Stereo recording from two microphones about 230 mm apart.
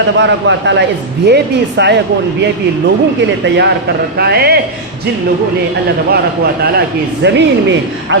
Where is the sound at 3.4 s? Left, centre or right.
Right.